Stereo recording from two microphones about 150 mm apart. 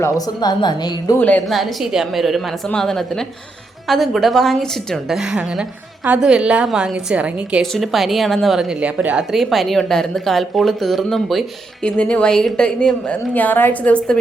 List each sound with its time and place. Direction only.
0.0 s a woman's voice: 25° left (ahead or behind)
1.5 s a woman's voice: centre (ahead or behind)